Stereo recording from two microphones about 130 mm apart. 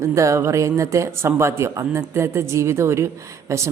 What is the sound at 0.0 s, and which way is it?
Speech, 25° right (ahead or behind).